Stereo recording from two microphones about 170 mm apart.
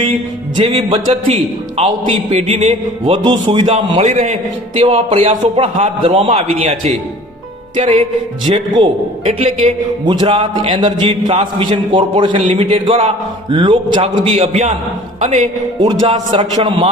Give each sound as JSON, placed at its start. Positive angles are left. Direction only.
{"t": 0.5, "sound": "a man's voice", "side_deg": -30}
{"t": 3.7, "sound": "a man's voice", "side_deg": -40}
{"t": 10.1, "sound": "a man's voice", "side_deg": -25}
{"t": 15.9, "sound": "a man's voice", "side_deg": -25}